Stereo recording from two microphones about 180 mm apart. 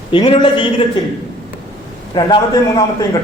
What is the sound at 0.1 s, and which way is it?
Speech, 30° left (ahead or behind).